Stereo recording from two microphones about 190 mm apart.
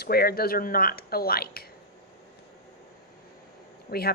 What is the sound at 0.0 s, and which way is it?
Speech, 50° left (ahead or behind).